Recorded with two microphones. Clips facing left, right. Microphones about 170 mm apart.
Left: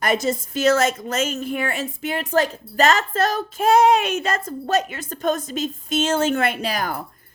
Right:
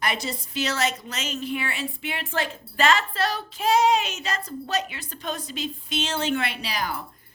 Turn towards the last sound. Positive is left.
turn(degrees=50)  # may be behind; listen again after turning